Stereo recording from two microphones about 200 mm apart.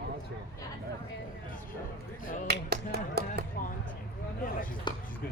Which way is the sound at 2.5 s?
50° right (ahead or behind).